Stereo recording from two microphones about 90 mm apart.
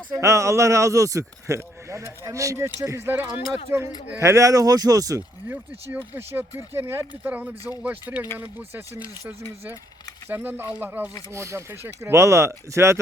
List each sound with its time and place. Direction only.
0.2 s speech: 35° right (ahead or behind)
4.2 s speech: 35° right (ahead or behind)
5.5 s speech: 25° right (ahead or behind)
10.2 s speech: 25° right (ahead or behind)
11.3 s speech: 30° right (ahead or behind)